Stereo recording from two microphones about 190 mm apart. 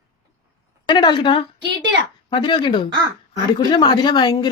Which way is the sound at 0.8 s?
25° left (ahead or behind).